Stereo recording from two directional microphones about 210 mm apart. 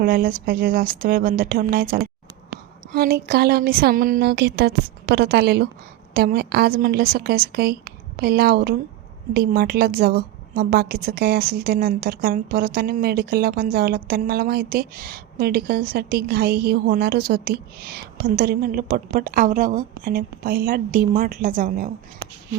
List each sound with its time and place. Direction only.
0.0 s a woman's voice: 40° right (ahead or behind)